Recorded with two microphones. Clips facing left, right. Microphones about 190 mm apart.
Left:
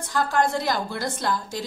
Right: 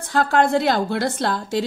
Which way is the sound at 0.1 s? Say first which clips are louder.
Right 5 dB; 65° right (ahead or behind).